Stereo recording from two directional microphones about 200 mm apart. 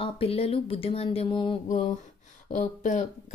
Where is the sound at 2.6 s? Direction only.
35° left (ahead or behind).